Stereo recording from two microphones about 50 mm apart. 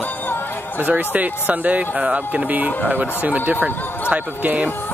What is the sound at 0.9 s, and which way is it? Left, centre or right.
Speech, right.